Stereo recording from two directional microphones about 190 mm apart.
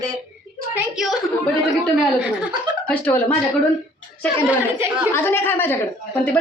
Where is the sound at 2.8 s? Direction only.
10° left (ahead or behind).